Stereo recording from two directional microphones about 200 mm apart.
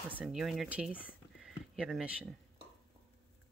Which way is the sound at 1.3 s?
5° right (ahead or behind).